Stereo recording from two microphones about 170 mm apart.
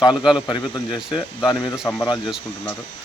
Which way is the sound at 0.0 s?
25° left (ahead or behind).